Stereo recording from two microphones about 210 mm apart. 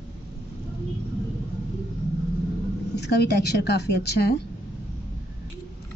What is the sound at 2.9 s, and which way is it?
A woman's voice, 55° left (ahead or behind).